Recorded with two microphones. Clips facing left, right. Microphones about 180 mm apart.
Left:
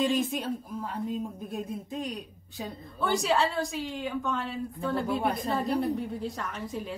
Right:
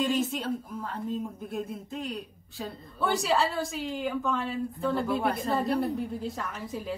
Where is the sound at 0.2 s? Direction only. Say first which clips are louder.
Right 1 dB; 15° left (ahead or behind).